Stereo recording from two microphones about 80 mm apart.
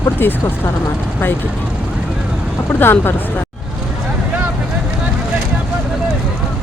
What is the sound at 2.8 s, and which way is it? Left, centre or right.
Speech, left.